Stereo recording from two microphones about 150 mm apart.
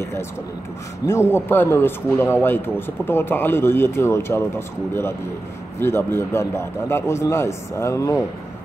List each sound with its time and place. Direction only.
1.0 s speech: 20° left (ahead or behind)